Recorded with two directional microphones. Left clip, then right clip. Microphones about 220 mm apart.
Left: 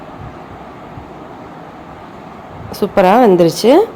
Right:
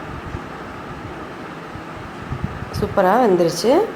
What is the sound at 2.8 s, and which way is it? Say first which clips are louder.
A woman's voice: left 6 dB; 35° left (ahead or behind).